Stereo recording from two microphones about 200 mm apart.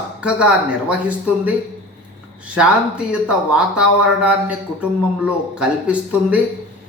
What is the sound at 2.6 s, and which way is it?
Speech, 5° right (ahead or behind).